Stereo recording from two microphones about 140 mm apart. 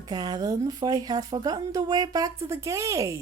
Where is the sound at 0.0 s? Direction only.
30° right (ahead or behind).